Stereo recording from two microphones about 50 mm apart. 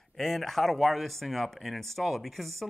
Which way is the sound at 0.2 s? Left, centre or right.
Centre.